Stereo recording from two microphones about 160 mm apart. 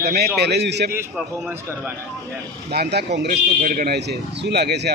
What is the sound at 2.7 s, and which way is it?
Speech, 85° right.